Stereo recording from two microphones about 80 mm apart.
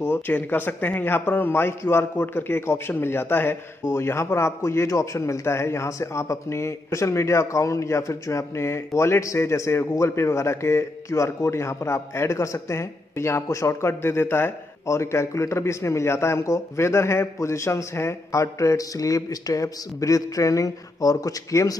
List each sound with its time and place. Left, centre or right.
0.0 s a man's voice: left